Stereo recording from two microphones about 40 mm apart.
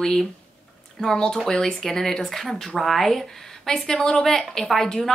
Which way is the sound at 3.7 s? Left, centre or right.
Centre.